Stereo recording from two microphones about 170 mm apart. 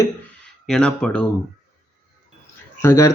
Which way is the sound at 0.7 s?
5° left (ahead or behind).